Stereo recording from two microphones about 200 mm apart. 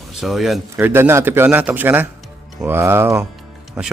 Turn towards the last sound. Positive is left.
turn(degrees=-5)  # may be behind; listen again after turning